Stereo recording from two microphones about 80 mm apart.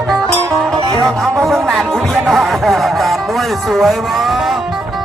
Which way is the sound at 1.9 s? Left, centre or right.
Centre.